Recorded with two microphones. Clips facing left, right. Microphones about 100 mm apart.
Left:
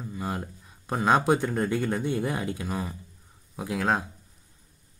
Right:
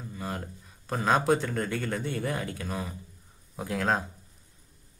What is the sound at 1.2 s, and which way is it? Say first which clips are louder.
Speech: left 2 dB; 15° left (ahead or behind).